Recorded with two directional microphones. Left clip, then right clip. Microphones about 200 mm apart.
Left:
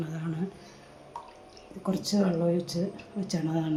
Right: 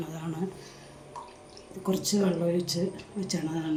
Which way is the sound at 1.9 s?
10° left (ahead or behind).